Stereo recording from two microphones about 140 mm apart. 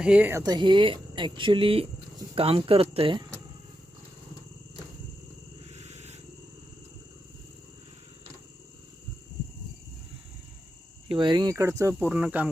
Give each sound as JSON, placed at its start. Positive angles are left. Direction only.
{"t": 0.0, "sound": "speech", "side_deg": -10}
{"t": 0.4, "sound": "speech", "side_deg": -30}
{"t": 5.6, "sound": "a sound", "side_deg": -50}
{"t": 11.1, "sound": "speech", "side_deg": -35}